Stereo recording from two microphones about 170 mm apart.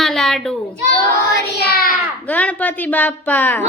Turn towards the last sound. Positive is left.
turn(degrees=10)  # may be behind; listen again after turning